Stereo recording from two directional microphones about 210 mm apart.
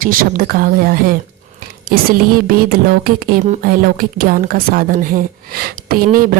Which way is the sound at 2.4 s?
45° right (ahead or behind).